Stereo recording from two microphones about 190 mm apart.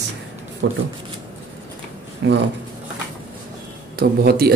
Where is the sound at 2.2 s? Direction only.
70° right (ahead or behind).